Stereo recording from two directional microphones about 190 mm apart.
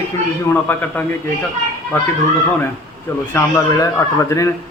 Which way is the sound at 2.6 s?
10° left (ahead or behind).